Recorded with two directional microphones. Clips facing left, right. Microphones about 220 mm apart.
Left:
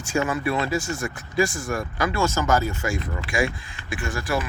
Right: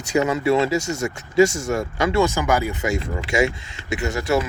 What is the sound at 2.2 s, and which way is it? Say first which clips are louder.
Speech: right 1 dB; 15° right (ahead or behind).